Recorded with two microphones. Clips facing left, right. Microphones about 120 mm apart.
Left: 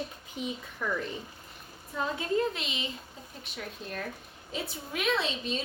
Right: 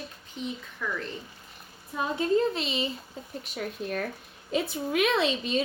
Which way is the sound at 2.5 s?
35° right (ahead or behind).